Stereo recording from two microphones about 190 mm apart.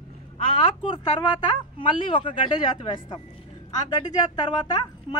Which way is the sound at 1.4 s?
25° left (ahead or behind).